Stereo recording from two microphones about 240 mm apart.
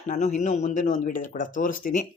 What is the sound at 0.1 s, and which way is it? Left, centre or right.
Speech, left.